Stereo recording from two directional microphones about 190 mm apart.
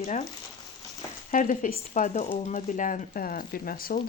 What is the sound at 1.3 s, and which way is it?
Speech, 45° left (ahead or behind).